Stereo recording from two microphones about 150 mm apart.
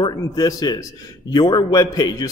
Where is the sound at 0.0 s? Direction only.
25° left (ahead or behind).